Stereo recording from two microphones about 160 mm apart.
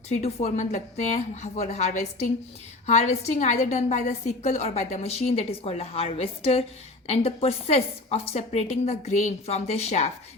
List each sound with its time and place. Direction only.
0.1 s a woman's voice: 40° left (ahead or behind)